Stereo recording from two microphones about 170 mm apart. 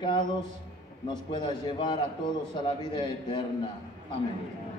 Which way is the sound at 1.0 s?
25° left (ahead or behind).